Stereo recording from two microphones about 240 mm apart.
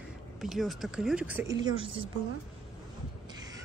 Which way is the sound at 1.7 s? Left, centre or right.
Right.